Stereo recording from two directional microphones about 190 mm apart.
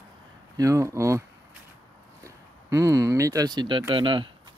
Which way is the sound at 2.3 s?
15° right (ahead or behind).